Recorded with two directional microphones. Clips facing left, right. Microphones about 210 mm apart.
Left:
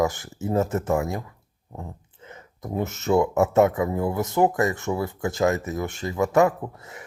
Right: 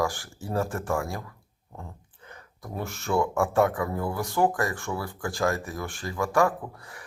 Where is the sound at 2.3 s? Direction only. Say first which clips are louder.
Left 7 dB; 20° left (ahead or behind).